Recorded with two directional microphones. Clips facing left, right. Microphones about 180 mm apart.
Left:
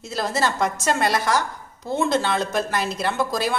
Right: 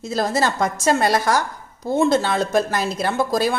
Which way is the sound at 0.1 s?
45° right (ahead or behind).